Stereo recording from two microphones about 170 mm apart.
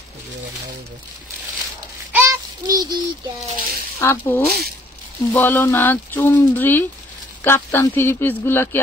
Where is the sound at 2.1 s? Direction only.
20° right (ahead or behind).